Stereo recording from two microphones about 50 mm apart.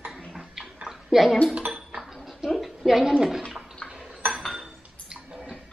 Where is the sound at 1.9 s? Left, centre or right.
Centre.